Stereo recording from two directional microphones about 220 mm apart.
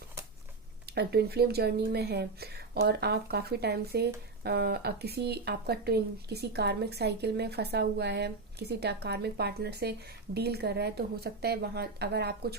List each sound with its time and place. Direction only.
0.9 s speech: 45° right (ahead or behind)